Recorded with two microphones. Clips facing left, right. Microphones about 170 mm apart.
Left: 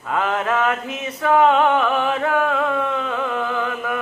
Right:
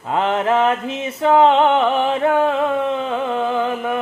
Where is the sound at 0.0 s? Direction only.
25° right (ahead or behind).